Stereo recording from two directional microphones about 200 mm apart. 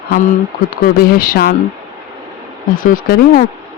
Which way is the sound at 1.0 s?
45° left (ahead or behind).